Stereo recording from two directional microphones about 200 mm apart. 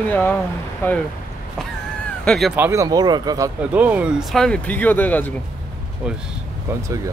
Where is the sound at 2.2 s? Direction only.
Centre (ahead or behind).